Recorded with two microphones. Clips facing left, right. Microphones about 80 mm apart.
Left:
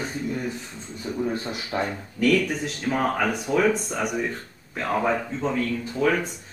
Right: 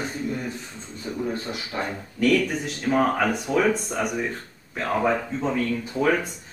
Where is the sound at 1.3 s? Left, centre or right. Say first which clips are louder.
Left 1 dB; left.